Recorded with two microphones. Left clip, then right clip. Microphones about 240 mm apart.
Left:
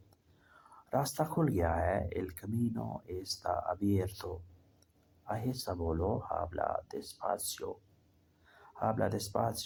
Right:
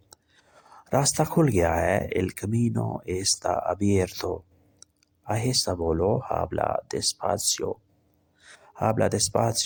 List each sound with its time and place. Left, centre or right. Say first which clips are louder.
0.1 s speech: right 9 dB; right